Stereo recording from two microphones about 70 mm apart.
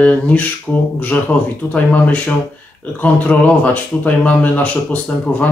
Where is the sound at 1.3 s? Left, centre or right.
Centre.